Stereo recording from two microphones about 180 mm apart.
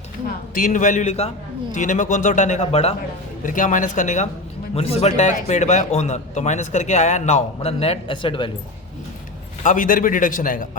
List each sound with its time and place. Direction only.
0.3 s a man's voice: 50° left (ahead or behind); by 8.4 s 25° left (ahead or behind)
9.6 s a man's voice: 50° left (ahead or behind)